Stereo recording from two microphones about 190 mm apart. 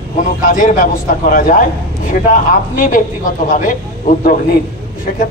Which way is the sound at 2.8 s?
45° left (ahead or behind).